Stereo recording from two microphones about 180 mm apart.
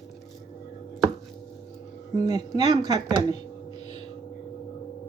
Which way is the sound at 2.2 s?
20° right (ahead or behind).